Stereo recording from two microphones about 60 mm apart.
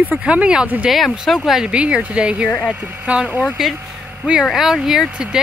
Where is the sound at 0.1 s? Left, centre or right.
Centre.